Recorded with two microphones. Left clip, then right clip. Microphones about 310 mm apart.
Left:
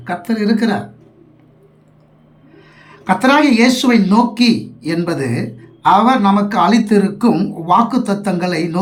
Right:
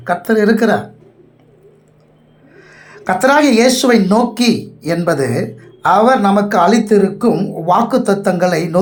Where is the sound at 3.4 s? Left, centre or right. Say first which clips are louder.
Right 2 dB; centre.